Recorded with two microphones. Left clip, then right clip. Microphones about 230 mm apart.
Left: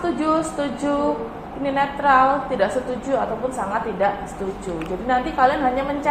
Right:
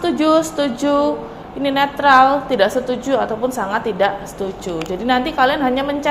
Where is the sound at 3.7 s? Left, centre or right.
Right.